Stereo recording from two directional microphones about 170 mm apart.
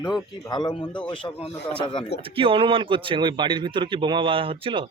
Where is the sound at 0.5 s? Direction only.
25° left (ahead or behind).